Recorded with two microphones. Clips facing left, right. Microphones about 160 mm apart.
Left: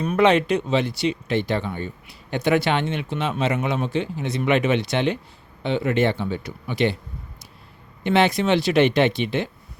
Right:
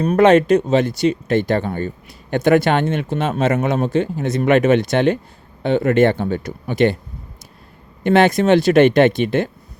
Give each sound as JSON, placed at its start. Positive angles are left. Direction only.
{"t": 0.0, "sound": "speech", "side_deg": -40}
{"t": 8.0, "sound": "speech", "side_deg": -50}